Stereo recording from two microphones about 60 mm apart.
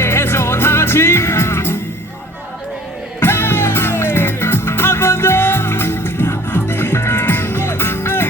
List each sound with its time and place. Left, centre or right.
0.0 s music: left
3.2 s music: left